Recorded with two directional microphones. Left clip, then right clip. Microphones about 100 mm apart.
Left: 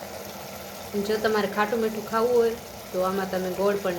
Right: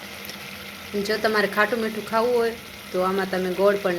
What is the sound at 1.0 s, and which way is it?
Speech, 40° right (ahead or behind).